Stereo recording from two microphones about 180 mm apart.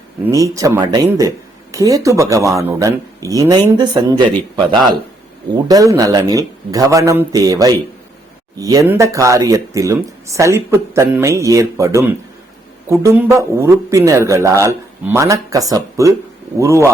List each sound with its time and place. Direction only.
0.3 s a man's voice: 20° right (ahead or behind)
5.5 s a man's voice: 20° right (ahead or behind)